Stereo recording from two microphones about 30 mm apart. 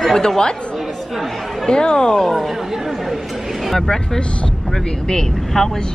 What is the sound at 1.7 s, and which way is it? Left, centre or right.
Speech, left.